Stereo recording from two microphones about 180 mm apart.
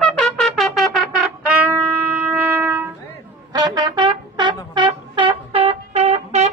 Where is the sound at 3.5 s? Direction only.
25° right (ahead or behind).